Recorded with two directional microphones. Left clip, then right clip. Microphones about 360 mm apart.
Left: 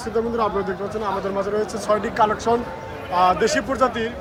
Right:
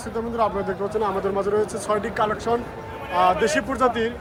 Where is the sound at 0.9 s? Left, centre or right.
Centre.